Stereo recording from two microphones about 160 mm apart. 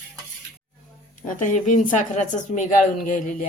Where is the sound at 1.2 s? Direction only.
55° left (ahead or behind).